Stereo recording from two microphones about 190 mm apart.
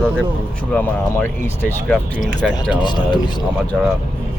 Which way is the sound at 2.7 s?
25° left (ahead or behind).